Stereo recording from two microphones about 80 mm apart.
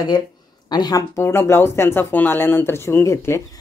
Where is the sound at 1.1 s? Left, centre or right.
Left.